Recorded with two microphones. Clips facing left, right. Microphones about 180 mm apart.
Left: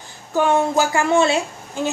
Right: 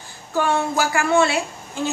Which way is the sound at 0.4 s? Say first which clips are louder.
Left 3 dB; 20° left (ahead or behind).